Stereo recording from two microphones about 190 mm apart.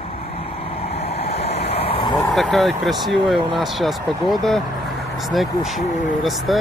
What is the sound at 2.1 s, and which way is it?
Speech, centre (ahead or behind).